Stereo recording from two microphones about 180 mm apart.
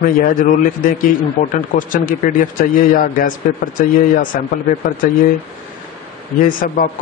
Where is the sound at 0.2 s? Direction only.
50° left (ahead or behind).